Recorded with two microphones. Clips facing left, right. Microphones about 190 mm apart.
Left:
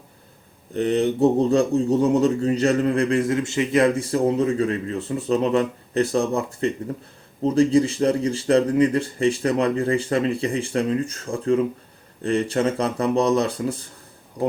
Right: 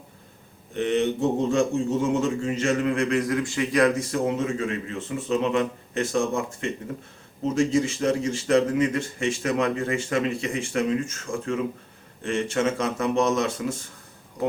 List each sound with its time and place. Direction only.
0.7 s speech: 35° left (ahead or behind)